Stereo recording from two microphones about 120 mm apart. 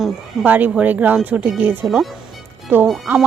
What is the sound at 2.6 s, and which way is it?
Speech, 15° right (ahead or behind).